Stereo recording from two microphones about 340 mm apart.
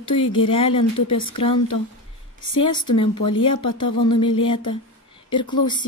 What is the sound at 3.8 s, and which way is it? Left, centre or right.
Music, centre.